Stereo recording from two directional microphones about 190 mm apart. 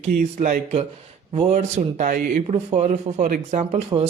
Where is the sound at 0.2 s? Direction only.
45° right (ahead or behind).